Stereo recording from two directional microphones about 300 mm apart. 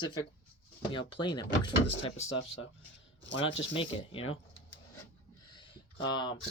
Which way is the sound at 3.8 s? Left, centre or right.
Centre.